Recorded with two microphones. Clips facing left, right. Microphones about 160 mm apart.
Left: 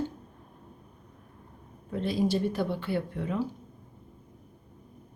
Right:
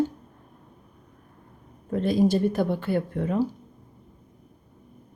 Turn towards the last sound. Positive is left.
turn(degrees=-45)  # may be behind; listen again after turning